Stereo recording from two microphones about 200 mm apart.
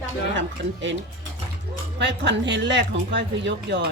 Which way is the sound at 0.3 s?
65° right (ahead or behind).